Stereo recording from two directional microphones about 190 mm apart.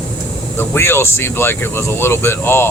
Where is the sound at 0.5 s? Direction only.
10° left (ahead or behind).